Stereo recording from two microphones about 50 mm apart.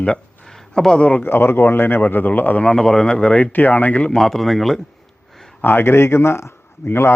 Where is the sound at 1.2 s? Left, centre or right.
Left.